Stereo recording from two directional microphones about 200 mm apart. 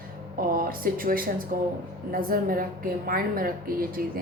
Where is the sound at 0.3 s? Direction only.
45° right (ahead or behind).